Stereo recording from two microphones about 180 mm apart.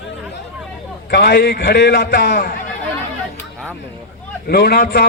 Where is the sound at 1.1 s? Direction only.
65° left (ahead or behind).